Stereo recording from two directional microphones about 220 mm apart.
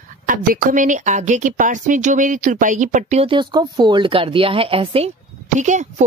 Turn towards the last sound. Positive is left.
turn(degrees=-35)  # may be behind; listen again after turning